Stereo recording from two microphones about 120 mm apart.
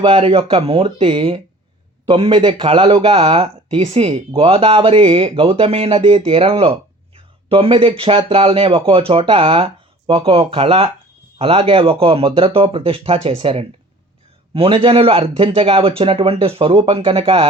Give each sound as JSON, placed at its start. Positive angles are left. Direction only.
{"t": 0.0, "sound": "speech", "side_deg": -50}